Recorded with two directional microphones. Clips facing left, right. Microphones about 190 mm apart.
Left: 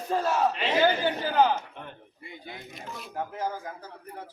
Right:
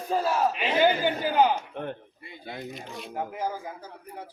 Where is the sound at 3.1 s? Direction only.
10° right (ahead or behind).